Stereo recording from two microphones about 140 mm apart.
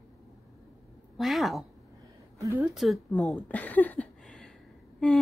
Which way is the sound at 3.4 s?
10° left (ahead or behind).